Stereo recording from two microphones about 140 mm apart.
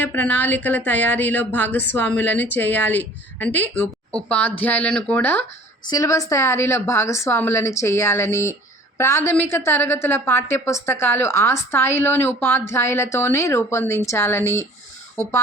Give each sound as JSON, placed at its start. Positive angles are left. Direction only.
{"t": 0.0, "sound": "speech", "side_deg": 10}
{"t": 5.9, "sound": "a woman's voice", "side_deg": 25}